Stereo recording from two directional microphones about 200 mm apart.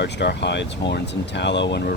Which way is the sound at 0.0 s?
60° left (ahead or behind).